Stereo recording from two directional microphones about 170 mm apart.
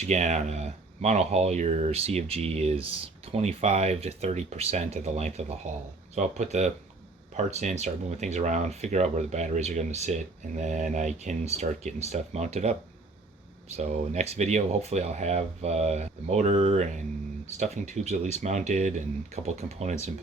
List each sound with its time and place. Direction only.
0.1 s speech: 45° right (ahead or behind)
13.7 s speech: 40° right (ahead or behind)